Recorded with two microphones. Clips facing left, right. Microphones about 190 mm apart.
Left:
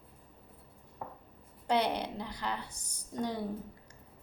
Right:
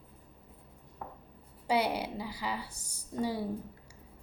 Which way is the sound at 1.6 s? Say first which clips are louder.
Even; 5° right (ahead or behind).